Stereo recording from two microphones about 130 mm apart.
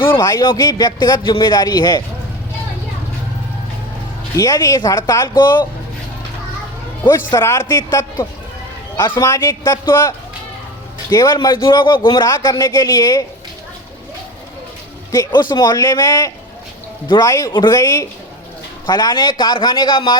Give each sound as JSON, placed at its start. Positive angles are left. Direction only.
{"t": 0.0, "sound": "speech", "side_deg": 35}
{"t": 4.4, "sound": "a man's voice", "side_deg": 25}
{"t": 5.4, "sound": "speech", "side_deg": 35}
{"t": 7.3, "sound": "a man's voice", "side_deg": 25}
{"t": 9.0, "sound": "a man's voice", "side_deg": 40}
{"t": 9.2, "sound": "a man's voice", "side_deg": 25}
{"t": 15.1, "sound": "a man's voice", "side_deg": 30}